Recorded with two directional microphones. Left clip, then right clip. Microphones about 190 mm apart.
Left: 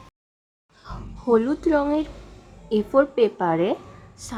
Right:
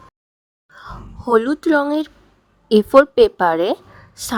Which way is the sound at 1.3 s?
50° right (ahead or behind).